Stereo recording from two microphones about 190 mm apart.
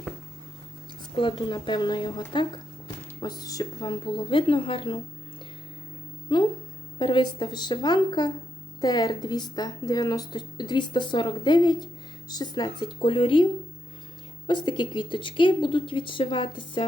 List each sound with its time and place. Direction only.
1.1 s a woman's voice: 25° left (ahead or behind)
6.3 s a woman's voice: 25° left (ahead or behind)